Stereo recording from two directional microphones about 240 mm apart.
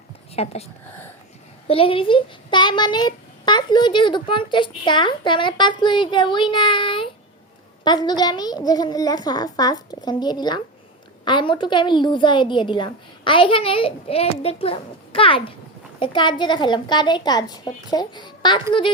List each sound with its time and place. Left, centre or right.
0.3 s a child's voice: left